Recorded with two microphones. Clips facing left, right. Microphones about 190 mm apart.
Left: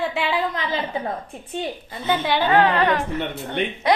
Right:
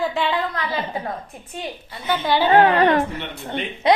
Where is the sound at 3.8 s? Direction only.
25° right (ahead or behind).